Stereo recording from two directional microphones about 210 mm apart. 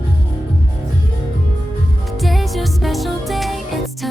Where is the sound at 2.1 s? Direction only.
Centre (ahead or behind).